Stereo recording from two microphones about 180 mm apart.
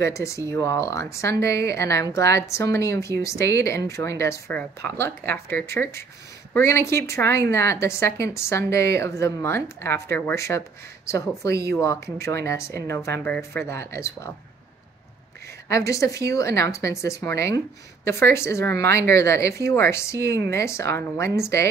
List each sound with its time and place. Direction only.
0.0 s a woman's voice: 15° left (ahead or behind)
15.7 s a woman's voice: 15° left (ahead or behind)